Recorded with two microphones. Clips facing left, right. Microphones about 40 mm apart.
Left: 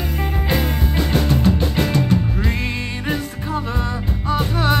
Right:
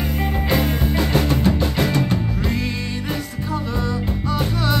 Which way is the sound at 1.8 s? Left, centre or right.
Right.